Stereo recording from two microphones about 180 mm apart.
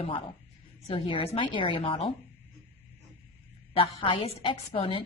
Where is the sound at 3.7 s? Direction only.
30° left (ahead or behind).